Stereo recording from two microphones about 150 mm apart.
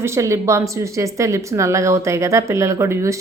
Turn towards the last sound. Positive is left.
turn(degrees=-20)  # may be behind; listen again after turning